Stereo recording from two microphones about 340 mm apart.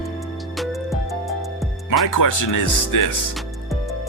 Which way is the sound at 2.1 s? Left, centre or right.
Left.